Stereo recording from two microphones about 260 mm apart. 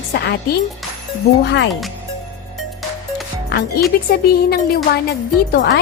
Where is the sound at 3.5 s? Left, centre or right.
Left.